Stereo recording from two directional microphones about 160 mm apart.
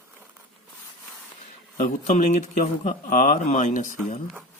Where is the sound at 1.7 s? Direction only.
45° left (ahead or behind).